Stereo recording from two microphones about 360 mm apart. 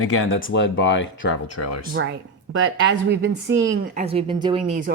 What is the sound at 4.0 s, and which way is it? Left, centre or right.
Speech, centre.